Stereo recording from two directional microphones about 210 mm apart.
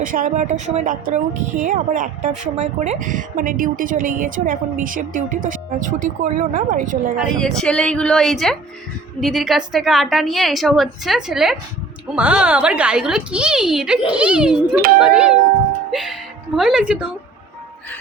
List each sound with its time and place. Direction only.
0.0 s speech: 40° right (ahead or behind)
7.3 s a woman's voice: 5° left (ahead or behind)